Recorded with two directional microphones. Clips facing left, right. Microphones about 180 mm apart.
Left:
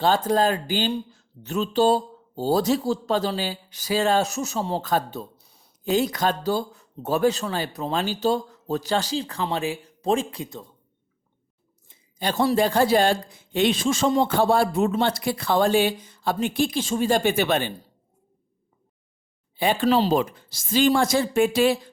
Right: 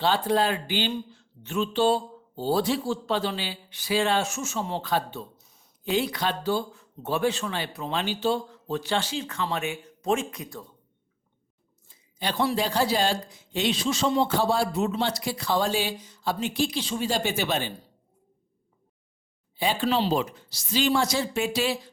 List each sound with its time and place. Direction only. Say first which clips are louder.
0.0 s speech: left 3 dB; 45° left (ahead or behind); by 10.7 s 25° left (ahead or behind)
12.2 s speech: left 5 dB; 45° left (ahead or behind)
19.5 s speech: left 5 dB; 55° left (ahead or behind)